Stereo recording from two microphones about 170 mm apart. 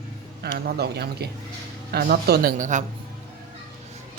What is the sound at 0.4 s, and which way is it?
A man's voice, 70° right (ahead or behind).